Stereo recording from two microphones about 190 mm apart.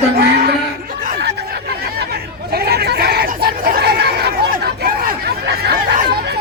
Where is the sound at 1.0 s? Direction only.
60° right (ahead or behind).